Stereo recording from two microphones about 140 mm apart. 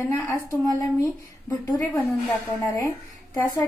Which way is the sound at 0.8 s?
25° left (ahead or behind).